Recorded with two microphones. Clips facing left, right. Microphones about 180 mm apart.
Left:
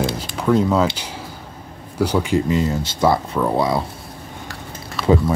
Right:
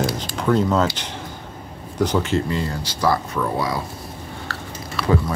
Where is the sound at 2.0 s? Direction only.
10° left (ahead or behind).